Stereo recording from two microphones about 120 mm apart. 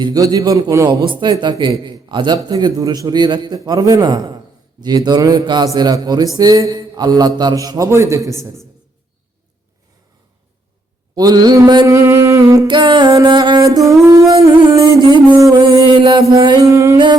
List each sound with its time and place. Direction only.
0.0 s a man's voice: 35° right (ahead or behind)
0.9 s a man's voice: 40° right (ahead or behind); by 8.4 s 25° right (ahead or behind)
11.1 s a man's voice: 35° right (ahead or behind)
11.9 s humming: 20° right (ahead or behind)
12.7 s a man's voice: 40° right (ahead or behind)
13.2 s music: 40° right (ahead or behind)
14.3 s music: 40° right (ahead or behind)
15.4 s music: 30° right (ahead or behind)
15.8 s music: 45° right (ahead or behind)
16.3 s a man's voice: 40° right (ahead or behind)
16.6 s a man's voice: 25° right (ahead or behind)